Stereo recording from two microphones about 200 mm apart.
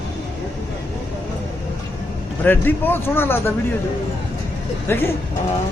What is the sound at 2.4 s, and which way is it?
Speech, 10° left (ahead or behind).